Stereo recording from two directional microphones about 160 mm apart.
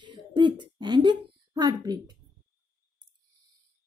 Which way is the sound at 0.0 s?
30° right (ahead or behind).